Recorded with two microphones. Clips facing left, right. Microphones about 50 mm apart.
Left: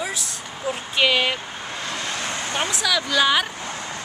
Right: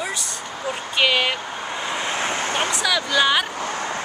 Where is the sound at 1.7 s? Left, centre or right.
Centre.